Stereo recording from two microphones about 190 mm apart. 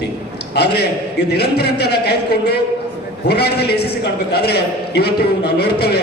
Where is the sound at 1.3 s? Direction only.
60° left (ahead or behind).